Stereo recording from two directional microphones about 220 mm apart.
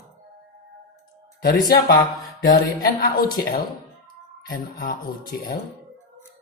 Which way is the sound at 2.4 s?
40° left (ahead or behind).